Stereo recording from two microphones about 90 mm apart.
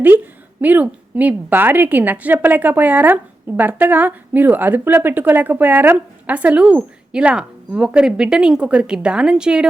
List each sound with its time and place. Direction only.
0.6 s a woman's voice: 20° right (ahead or behind)